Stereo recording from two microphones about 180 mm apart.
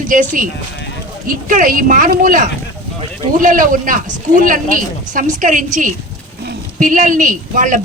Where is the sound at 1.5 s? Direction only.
50° right (ahead or behind).